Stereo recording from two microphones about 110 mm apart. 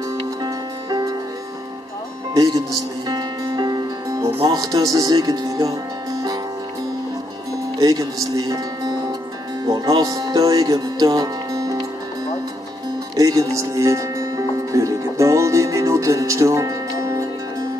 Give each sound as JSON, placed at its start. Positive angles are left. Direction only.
{"t": 0.2, "sound": "music", "side_deg": -40}
{"t": 2.3, "sound": "speech", "side_deg": -35}
{"t": 3.1, "sound": "music", "side_deg": -40}
{"t": 4.5, "sound": "speech", "side_deg": -35}
{"t": 7.8, "sound": "speech", "side_deg": -35}
{"t": 13.1, "sound": "music", "side_deg": -30}